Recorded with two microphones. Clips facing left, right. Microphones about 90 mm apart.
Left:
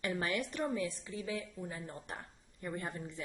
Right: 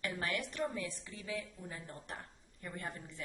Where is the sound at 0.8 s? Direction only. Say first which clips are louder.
Left 5 dB; 20° left (ahead or behind).